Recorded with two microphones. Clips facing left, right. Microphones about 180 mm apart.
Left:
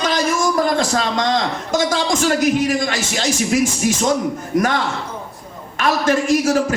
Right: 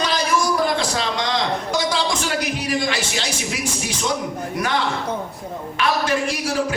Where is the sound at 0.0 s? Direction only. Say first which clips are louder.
Left 2 dB; 45° left (ahead or behind).